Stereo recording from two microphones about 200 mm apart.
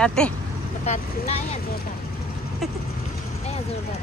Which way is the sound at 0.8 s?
30° left (ahead or behind).